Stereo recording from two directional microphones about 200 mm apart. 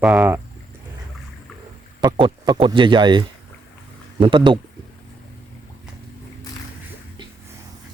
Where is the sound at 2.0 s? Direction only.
25° right (ahead or behind).